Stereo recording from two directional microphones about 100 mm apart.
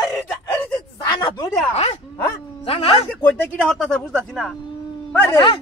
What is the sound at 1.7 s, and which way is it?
Speech, 90° left.